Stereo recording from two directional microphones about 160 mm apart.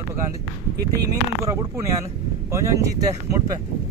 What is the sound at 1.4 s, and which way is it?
Speech, 20° right (ahead or behind).